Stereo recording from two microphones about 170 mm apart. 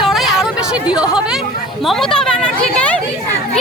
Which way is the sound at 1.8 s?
Centre (ahead or behind).